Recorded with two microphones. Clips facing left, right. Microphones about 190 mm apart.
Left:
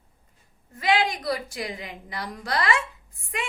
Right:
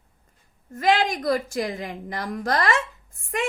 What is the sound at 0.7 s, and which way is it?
A woman's voice, 45° right (ahead or behind).